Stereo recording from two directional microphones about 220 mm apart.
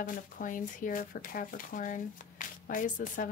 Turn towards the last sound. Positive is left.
turn(degrees=35)  # may be behind; listen again after turning